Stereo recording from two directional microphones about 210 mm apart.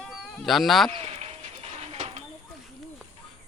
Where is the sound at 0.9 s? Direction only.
30° right (ahead or behind).